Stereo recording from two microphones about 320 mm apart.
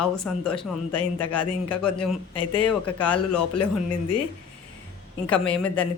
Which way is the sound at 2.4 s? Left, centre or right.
Left.